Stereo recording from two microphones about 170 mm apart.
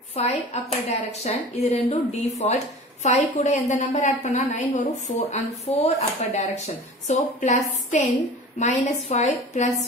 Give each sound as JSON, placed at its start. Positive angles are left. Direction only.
{"t": 0.1, "sound": "speech", "side_deg": 40}